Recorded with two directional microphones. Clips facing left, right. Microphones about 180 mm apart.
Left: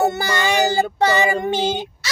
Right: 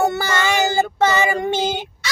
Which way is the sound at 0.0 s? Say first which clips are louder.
Even; 20° left (ahead or behind).